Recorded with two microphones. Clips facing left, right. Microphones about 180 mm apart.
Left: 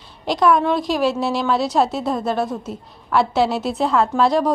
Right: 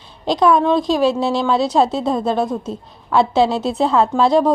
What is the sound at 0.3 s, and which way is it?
A woman's voice, 20° right (ahead or behind).